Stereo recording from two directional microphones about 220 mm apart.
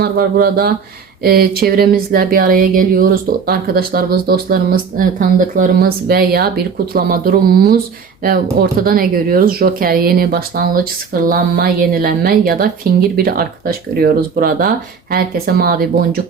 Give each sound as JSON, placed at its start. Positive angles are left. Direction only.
{"t": 0.0, "sound": "speech", "side_deg": -45}